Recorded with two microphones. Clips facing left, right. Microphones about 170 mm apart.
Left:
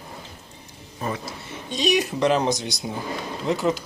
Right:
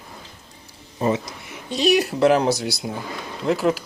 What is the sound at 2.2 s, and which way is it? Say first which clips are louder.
Speech: right 5 dB; 5° right (ahead or behind).